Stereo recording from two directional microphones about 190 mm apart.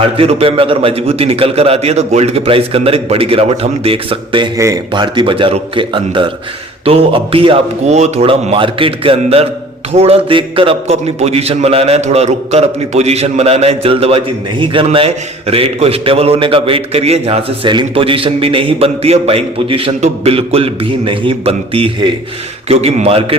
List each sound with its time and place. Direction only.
0.2 s a man's voice: 30° right (ahead or behind)
4.5 s a man's voice: 15° right (ahead or behind)